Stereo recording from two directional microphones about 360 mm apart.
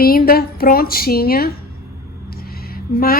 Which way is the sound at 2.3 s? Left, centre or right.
Left.